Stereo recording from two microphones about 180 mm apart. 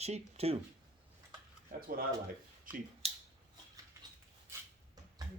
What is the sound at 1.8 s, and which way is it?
Speech, 55° right (ahead or behind).